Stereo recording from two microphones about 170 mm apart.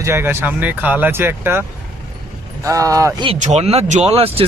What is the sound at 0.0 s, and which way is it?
Speech, 15° right (ahead or behind).